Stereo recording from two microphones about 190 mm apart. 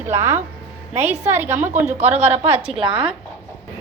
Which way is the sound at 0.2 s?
15° right (ahead or behind).